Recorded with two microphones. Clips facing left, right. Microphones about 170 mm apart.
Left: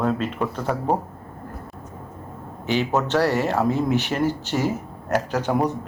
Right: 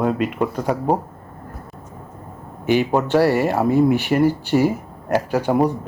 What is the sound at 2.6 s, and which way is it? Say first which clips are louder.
Speech: right 4 dB; 15° right (ahead or behind).